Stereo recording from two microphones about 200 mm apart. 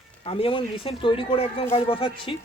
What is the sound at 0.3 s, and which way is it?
Speech, 25° left (ahead or behind).